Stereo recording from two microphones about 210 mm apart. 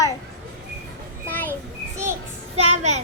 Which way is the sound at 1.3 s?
10° left (ahead or behind).